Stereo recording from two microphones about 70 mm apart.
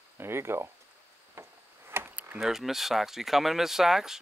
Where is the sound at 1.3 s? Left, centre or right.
Right.